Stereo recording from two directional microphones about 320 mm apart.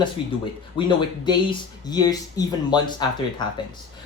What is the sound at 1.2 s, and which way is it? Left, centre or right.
Speech, centre.